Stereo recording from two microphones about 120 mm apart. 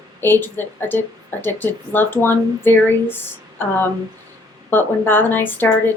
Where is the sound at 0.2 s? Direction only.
15° left (ahead or behind).